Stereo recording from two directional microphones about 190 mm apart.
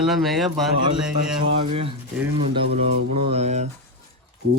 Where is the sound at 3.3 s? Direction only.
35° right (ahead or behind).